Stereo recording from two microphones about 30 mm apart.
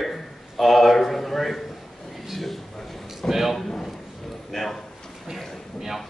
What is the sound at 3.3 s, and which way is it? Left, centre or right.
Speech, centre.